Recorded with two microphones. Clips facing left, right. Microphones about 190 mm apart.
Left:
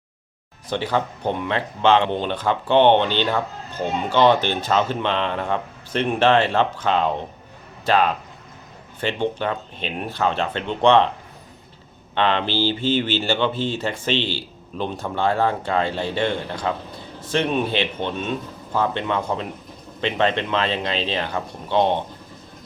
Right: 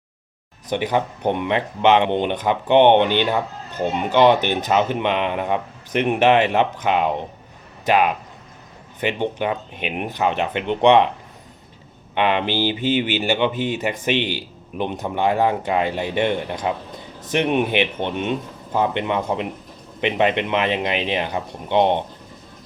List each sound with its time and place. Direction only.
0.7 s speech: 15° right (ahead or behind)
12.1 s speech: 15° right (ahead or behind)